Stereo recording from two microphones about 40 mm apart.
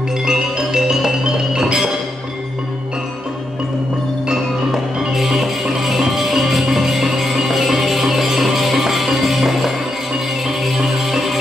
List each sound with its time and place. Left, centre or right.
0.2 s music: centre
5.1 s music: centre